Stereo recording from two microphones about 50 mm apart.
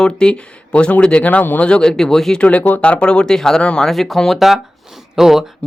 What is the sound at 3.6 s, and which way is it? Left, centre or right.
Speech, left.